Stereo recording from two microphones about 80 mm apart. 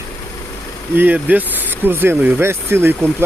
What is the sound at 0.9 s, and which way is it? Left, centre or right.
Speech, right.